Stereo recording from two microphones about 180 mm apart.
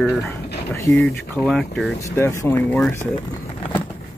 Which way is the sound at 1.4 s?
Centre (ahead or behind).